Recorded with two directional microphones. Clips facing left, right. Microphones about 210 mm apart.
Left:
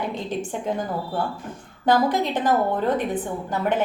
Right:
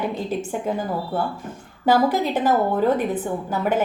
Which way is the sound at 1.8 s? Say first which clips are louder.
Right 1 dB; 5° right (ahead or behind).